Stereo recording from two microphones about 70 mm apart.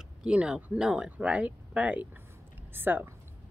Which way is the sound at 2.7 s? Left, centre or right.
Right.